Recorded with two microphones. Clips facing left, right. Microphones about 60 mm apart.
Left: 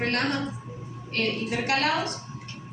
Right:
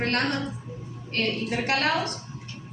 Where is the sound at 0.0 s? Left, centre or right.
Right.